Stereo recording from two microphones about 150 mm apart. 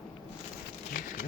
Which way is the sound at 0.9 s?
65° left (ahead or behind).